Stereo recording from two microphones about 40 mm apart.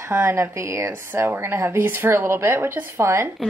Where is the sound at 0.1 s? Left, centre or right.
Right.